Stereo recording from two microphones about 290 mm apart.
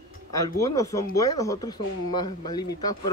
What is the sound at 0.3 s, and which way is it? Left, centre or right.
Speech, centre.